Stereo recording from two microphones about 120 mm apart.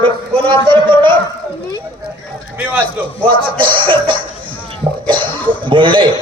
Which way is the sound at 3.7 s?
45° right (ahead or behind).